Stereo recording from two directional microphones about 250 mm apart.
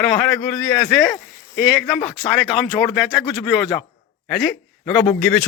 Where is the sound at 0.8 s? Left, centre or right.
Centre.